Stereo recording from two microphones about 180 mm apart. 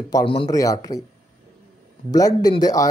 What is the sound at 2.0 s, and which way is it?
Speech, 20° left (ahead or behind).